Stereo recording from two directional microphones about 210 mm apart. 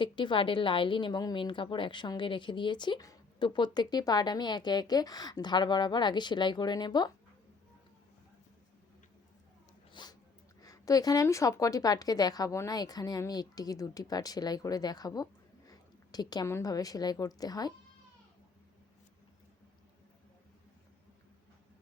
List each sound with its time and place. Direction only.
0.0 s a woman's voice: 25° left (ahead or behind)
9.9 s a sound: 20° left (ahead or behind)
10.6 s a woman's voice: 15° left (ahead or behind)